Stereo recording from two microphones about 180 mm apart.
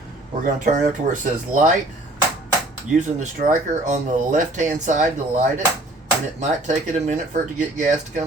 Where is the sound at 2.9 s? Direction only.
40° right (ahead or behind).